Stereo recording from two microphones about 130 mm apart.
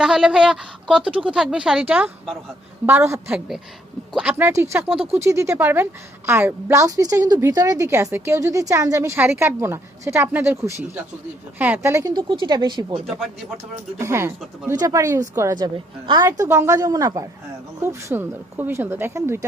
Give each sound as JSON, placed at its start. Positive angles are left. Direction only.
{"t": 0.0, "sound": "a woman's voice", "side_deg": -5}
{"t": 14.0, "sound": "a woman's voice", "side_deg": -20}
{"t": 15.5, "sound": "a woman's voice", "side_deg": -35}
{"t": 16.2, "sound": "a woman's voice", "side_deg": -20}